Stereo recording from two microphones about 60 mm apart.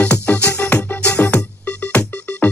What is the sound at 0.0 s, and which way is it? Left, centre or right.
Music, left.